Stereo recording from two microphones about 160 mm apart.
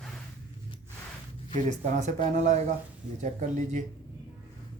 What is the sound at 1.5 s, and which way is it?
Speech, 45° right (ahead or behind).